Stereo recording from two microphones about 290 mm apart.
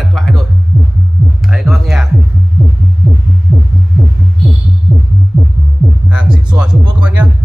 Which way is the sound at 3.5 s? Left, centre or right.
Centre.